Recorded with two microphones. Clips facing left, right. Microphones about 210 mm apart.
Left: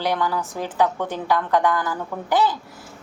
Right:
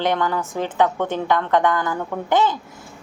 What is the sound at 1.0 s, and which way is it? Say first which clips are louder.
Speech: right 4 dB; 20° right (ahead or behind).